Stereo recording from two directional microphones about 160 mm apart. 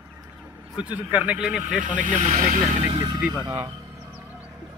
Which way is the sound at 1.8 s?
55° right (ahead or behind).